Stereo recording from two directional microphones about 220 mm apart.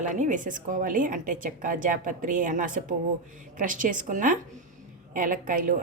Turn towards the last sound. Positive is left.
turn(degrees=-35)  # may be behind; listen again after turning